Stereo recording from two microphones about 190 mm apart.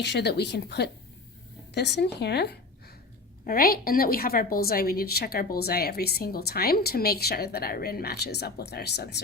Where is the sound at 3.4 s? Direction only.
50° left (ahead or behind).